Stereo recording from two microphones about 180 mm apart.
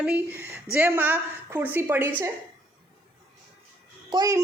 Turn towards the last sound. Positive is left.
turn(degrees=-20)  # may be behind; listen again after turning